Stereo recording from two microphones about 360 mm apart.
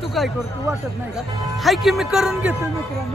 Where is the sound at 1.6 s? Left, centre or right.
Centre.